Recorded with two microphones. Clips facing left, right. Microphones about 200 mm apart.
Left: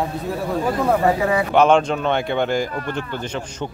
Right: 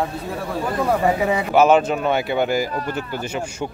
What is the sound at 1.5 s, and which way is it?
A man's voice, 5° right (ahead or behind).